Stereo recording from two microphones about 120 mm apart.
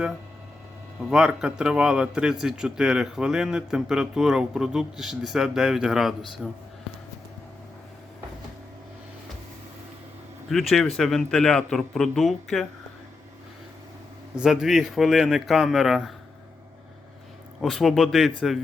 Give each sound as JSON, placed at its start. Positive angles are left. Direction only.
{"t": 1.1, "sound": "a man's voice", "side_deg": -5}
{"t": 10.5, "sound": "a man's voice", "side_deg": 0}
{"t": 14.3, "sound": "a man's voice", "side_deg": -5}
{"t": 17.6, "sound": "a man's voice", "side_deg": 0}